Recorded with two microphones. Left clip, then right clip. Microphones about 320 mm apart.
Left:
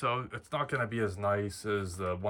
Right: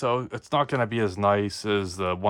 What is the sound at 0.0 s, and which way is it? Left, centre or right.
Speech, centre.